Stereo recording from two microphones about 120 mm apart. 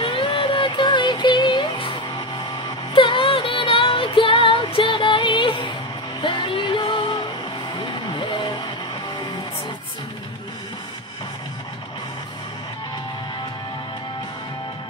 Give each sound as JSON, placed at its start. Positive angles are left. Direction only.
{"t": 0.0, "sound": "music", "side_deg": 45}
{"t": 8.1, "sound": "vehicle", "side_deg": 40}